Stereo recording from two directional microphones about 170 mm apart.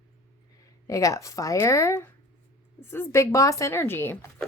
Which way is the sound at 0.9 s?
20° left (ahead or behind).